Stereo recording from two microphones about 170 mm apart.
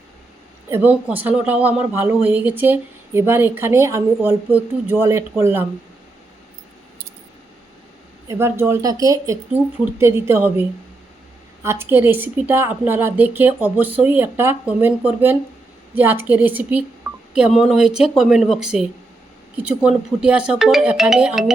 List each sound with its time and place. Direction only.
0.7 s a woman's voice: 10° right (ahead or behind)
8.3 s a woman's voice: 15° right (ahead or behind)